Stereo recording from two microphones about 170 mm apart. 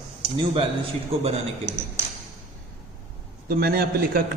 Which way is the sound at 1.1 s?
35° right (ahead or behind).